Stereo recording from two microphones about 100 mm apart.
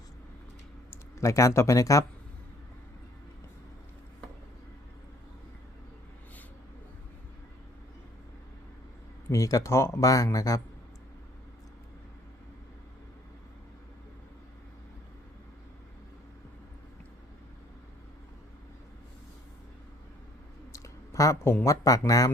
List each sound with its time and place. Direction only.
0.9 s speech: 30° left (ahead or behind)
9.3 s speech: 30° left (ahead or behind)
20.7 s a sound: 30° left (ahead or behind)
21.6 s speech: 35° left (ahead or behind)